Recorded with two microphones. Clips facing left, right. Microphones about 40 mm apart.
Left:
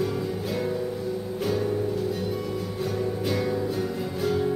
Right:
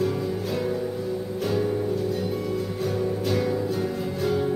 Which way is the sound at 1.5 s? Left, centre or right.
Centre.